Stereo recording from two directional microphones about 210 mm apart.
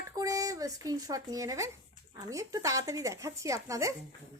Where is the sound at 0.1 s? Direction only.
15° right (ahead or behind).